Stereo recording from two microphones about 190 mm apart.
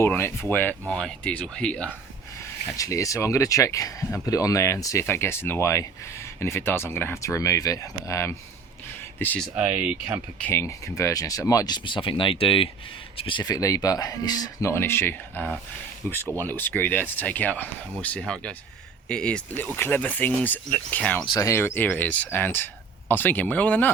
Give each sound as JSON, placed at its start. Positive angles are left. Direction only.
{"t": 0.0, "sound": "speech", "side_deg": 10}
{"t": 2.7, "sound": "speech", "side_deg": 15}
{"t": 9.6, "sound": "speech", "side_deg": -10}
{"t": 10.4, "sound": "speech", "side_deg": 15}
{"t": 21.2, "sound": "speech", "side_deg": 20}